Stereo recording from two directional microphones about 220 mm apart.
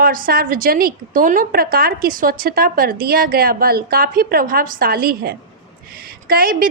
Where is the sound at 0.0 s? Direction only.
40° right (ahead or behind).